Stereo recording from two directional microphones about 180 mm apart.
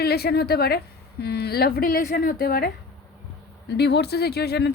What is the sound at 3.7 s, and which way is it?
Speech, 65° left (ahead or behind).